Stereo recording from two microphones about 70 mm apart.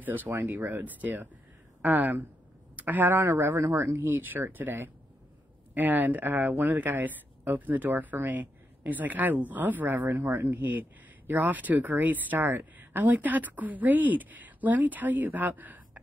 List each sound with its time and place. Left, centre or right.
0.0 s speech: right
3.2 s speech: right